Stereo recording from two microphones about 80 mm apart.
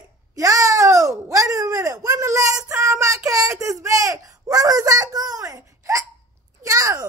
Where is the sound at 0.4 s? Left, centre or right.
Right.